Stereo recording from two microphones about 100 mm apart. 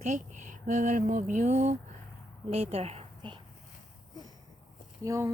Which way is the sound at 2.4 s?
90° right.